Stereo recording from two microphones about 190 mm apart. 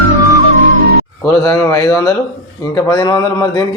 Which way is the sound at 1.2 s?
15° left (ahead or behind).